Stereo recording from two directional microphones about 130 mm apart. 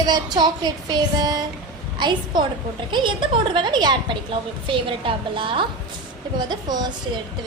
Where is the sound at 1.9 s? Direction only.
35° right (ahead or behind).